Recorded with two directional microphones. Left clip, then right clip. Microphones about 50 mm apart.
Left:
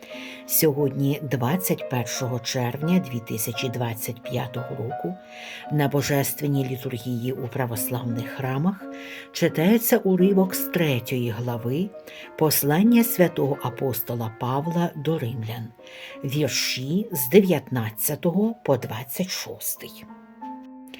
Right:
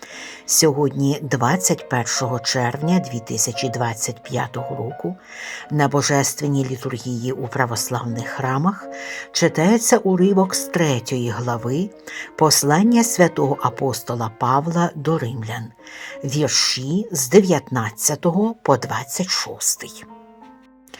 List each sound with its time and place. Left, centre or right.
0.4 s speech: centre
1.8 s speech: centre
6.1 s speech: centre
8.5 s speech: centre
9.3 s speech: centre
10.3 s speech: centre
10.6 s speech: centre
12.4 s speech: centre